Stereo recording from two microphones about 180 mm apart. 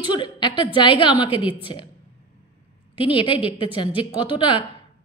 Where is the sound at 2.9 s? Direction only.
30° left (ahead or behind).